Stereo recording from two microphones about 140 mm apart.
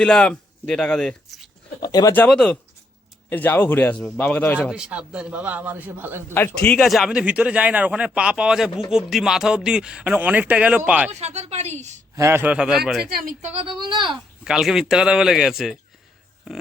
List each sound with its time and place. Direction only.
0.0 s speech: 5° left (ahead or behind)
1.8 s speech: 25° left (ahead or behind)
2.1 s a man's voice: 5° left (ahead or behind)
4.7 s a man's voice: 5° right (ahead or behind)
6.3 s a man's voice: 15° left (ahead or behind)
6.8 s a man's voice: centre (ahead or behind)
11.1 s speech: 50° right (ahead or behind)
12.1 s a man's voice: 20° right (ahead or behind); by 13.1 s centre (ahead or behind)
13.1 s speech: 90° right
13.8 s speech: 35° right (ahead or behind)
14.4 s speech: 5° right (ahead or behind)